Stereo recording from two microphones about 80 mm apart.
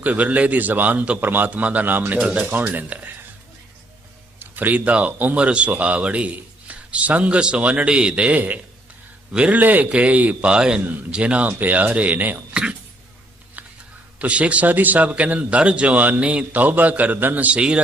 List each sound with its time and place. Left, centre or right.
0.0 s a man's voice: centre
4.4 s a man's voice: right
14.2 s speech: centre